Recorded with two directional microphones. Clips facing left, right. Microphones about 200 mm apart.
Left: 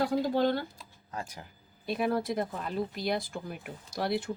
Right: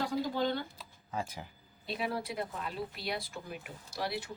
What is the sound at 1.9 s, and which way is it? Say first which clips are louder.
Speech: left 7 dB; 50° left (ahead or behind).